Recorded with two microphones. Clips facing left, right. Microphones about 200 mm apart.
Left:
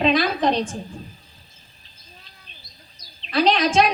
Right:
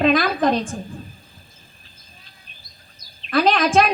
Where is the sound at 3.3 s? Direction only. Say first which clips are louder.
Right 2 dB; 50° right (ahead or behind).